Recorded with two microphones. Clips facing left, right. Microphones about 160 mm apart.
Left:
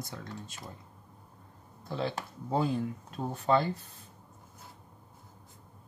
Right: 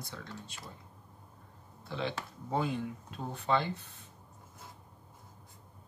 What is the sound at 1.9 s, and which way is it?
Speech, 40° left (ahead or behind).